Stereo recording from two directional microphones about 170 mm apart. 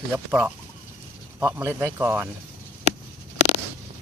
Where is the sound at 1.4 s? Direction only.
10° right (ahead or behind).